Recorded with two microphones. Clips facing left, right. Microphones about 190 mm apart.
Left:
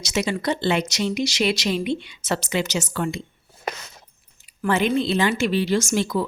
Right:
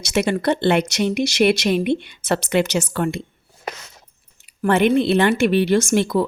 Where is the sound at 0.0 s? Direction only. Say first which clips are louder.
Right 5 dB; 60° right (ahead or behind).